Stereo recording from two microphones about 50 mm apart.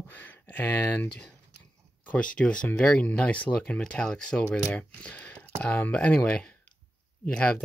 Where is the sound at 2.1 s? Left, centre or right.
Left.